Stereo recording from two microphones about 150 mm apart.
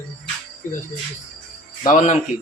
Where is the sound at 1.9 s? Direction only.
55° left (ahead or behind).